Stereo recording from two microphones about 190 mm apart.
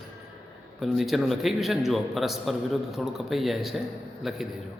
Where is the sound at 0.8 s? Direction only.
Centre (ahead or behind).